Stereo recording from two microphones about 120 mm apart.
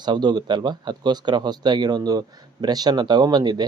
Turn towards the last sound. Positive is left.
turn(degrees=-35)  # may be behind; listen again after turning